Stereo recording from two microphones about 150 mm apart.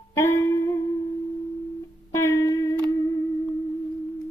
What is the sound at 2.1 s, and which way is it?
Music, 20° left (ahead or behind).